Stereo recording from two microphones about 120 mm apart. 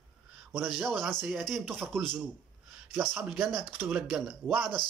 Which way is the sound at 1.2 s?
Centre (ahead or behind).